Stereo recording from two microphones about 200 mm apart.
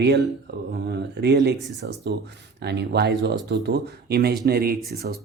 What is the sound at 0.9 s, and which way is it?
Speech, 55° right (ahead or behind).